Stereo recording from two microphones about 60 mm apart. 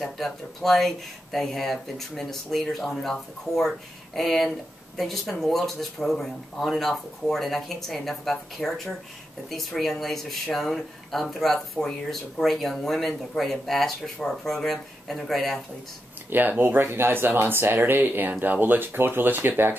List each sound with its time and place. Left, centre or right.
0.0 s speech: centre
16.3 s speech: right